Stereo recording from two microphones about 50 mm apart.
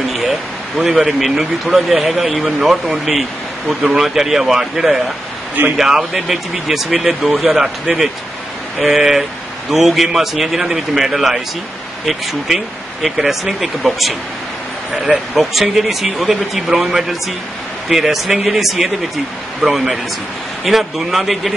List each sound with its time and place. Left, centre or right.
0.7 s speech: centre
3.6 s speech: right
4.0 s a man's voice: centre
15.7 s a man's voice: centre